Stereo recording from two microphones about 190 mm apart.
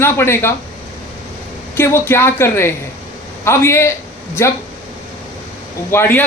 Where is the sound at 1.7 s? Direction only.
15° left (ahead or behind).